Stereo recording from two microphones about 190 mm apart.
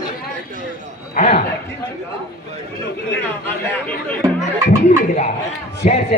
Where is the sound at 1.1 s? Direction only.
35° left (ahead or behind).